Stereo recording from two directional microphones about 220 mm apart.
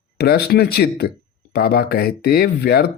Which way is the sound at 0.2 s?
50° left (ahead or behind).